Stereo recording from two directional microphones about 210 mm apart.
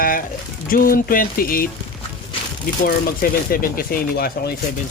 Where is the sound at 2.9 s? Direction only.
45° left (ahead or behind).